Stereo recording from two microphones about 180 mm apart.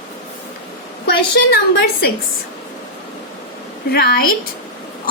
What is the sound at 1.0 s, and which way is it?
Speech, 60° left (ahead or behind).